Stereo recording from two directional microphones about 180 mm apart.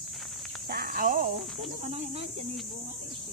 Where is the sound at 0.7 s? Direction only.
55° right (ahead or behind).